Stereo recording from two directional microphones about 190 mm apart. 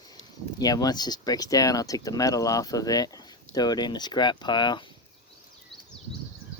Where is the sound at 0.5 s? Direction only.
20° left (ahead or behind).